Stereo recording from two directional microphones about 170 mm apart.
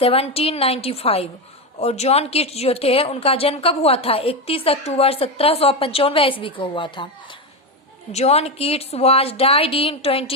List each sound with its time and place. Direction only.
0.0 s speech: 35° left (ahead or behind)
8.1 s speech: 40° left (ahead or behind)